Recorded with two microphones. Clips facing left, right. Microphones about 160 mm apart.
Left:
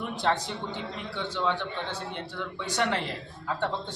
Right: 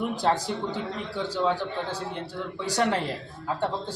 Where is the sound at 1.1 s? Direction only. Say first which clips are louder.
Right 3 dB; 40° right (ahead or behind).